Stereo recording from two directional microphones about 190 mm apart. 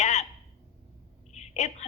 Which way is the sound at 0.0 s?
35° left (ahead or behind).